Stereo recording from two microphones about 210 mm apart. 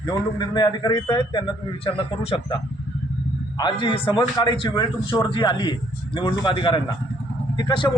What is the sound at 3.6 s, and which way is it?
Speech, 20° left (ahead or behind).